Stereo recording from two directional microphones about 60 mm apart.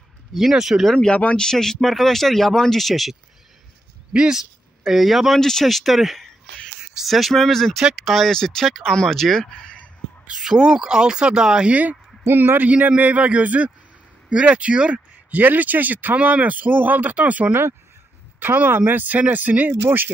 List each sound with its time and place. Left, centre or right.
0.3 s speech: centre
0.9 s speech: centre
4.1 s speech: centre
4.8 s speech: centre
10.4 s speech: centre
12.3 s speech: right; by 15.4 s centre
15.4 s speech: right